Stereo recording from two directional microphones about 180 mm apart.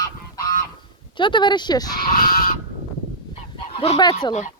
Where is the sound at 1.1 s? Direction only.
25° left (ahead or behind).